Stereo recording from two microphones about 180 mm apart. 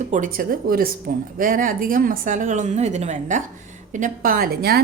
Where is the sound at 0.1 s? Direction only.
50° right (ahead or behind).